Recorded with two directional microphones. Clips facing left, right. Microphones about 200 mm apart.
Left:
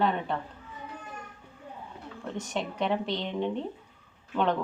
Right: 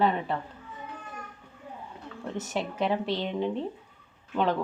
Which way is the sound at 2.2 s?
5° right (ahead or behind).